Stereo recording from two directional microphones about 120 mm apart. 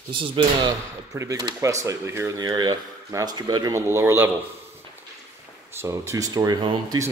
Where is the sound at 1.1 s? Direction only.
25° right (ahead or behind).